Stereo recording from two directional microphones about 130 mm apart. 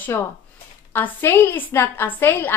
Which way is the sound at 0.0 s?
15° left (ahead or behind).